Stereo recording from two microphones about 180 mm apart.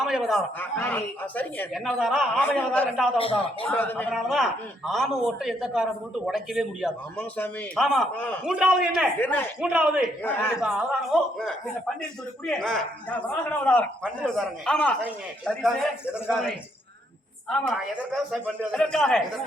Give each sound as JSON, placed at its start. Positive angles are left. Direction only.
{"t": 0.0, "sound": "speech", "side_deg": 0}
{"t": 0.6, "sound": "speech", "side_deg": 10}
{"t": 3.2, "sound": "speech", "side_deg": 30}
{"t": 3.7, "sound": "speech", "side_deg": 10}
{"t": 4.1, "sound": "speech", "side_deg": 0}
{"t": 7.2, "sound": "speech", "side_deg": 10}
{"t": 8.4, "sound": "speech", "side_deg": -5}
{"t": 9.2, "sound": "speech", "side_deg": 10}
{"t": 9.6, "sound": "speech", "side_deg": -5}
{"t": 17.9, "sound": "speech", "side_deg": -5}